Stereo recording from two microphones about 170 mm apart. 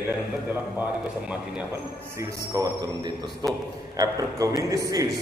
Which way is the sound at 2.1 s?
20° right (ahead or behind).